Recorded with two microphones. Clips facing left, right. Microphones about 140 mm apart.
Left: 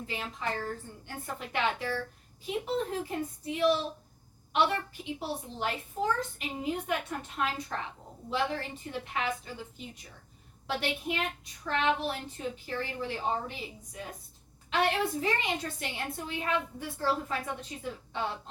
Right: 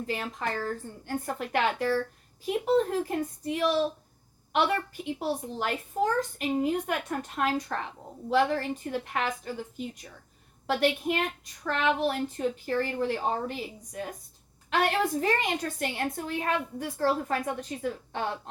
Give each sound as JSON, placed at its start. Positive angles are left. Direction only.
{"t": 0.1, "sound": "a woman's voice", "side_deg": -50}
{"t": 5.5, "sound": "a woman's voice", "side_deg": -50}